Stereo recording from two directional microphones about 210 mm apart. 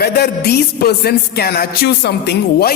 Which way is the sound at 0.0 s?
50° left (ahead or behind).